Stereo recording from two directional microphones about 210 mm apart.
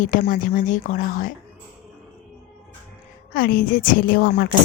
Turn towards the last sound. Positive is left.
turn(degrees=45)  # may be behind; listen again after turning